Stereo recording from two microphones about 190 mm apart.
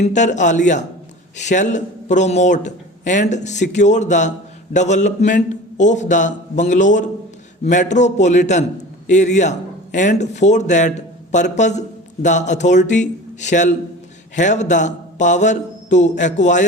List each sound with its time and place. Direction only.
0.0 s a man's voice: 40° left (ahead or behind)